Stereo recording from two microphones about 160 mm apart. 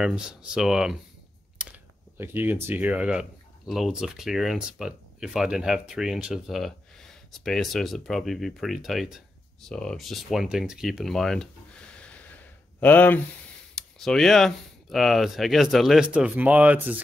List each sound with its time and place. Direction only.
0.0 s speech: 5° right (ahead or behind)
2.1 s speech: 10° right (ahead or behind)
11.9 s a sound: 5° left (ahead or behind)
13.7 s speech: 5° left (ahead or behind)